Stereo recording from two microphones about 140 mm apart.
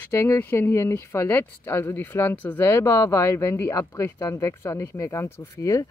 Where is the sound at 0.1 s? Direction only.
20° left (ahead or behind).